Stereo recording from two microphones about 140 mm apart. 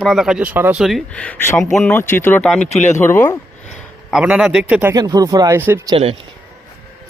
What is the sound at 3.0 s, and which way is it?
Speech, 15° left (ahead or behind).